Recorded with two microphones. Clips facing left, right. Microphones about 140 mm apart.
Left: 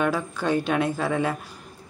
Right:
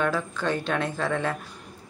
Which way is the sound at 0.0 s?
10° left (ahead or behind).